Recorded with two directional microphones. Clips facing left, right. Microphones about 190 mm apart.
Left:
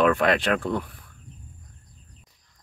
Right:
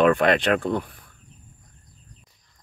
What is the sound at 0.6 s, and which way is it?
Speech, 25° right (ahead or behind).